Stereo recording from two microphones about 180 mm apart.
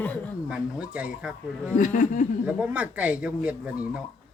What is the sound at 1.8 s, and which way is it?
Speech, 45° left (ahead or behind).